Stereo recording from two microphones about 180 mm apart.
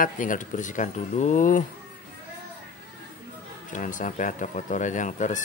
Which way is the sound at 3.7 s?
45° left (ahead or behind).